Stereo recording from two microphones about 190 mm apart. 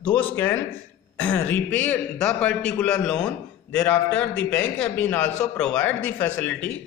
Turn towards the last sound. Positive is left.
turn(degrees=5)  # may be behind; listen again after turning